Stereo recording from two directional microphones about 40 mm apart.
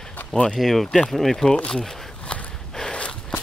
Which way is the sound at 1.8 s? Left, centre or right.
Left.